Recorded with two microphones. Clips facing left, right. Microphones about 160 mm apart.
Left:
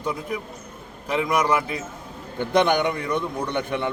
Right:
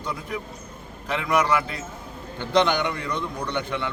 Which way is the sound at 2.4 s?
15° left (ahead or behind).